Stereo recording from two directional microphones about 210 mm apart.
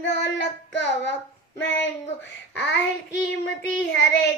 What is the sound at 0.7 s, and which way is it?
Child singing, 60° left (ahead or behind).